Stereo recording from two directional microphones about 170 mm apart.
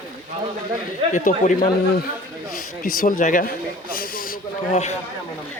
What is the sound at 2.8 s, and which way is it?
A man's voice, 50° left (ahead or behind).